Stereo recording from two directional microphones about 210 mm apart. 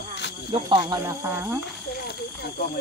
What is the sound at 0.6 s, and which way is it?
Speech, 20° right (ahead or behind).